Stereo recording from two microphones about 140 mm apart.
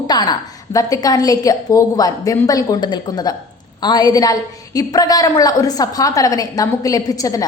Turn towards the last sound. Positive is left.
turn(degrees=25)  # may be behind; listen again after turning